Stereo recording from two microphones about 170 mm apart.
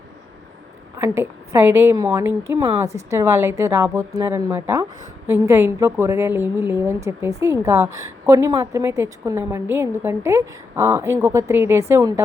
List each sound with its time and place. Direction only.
0.9 s a woman's voice: 15° right (ahead or behind)